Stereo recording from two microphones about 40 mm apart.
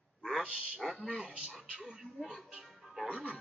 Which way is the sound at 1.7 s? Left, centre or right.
Centre.